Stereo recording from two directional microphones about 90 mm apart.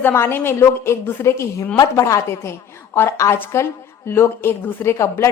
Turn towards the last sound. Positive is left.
turn(degrees=30)  # may be behind; listen again after turning